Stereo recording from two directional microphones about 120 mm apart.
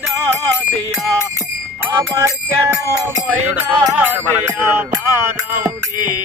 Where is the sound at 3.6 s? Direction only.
15° right (ahead or behind).